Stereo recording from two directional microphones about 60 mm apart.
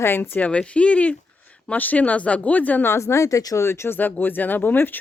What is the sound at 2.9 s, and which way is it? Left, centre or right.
Speech, left.